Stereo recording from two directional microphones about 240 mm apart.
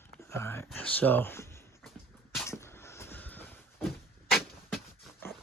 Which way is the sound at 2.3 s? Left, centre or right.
Centre.